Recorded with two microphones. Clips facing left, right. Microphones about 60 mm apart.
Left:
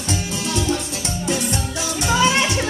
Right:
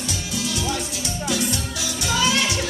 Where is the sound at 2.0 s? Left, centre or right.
Left.